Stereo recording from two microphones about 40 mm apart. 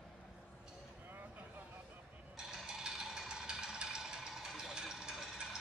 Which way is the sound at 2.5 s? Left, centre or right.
Centre.